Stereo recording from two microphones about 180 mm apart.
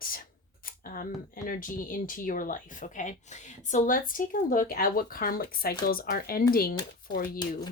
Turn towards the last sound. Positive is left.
turn(degrees=55)  # may be behind; listen again after turning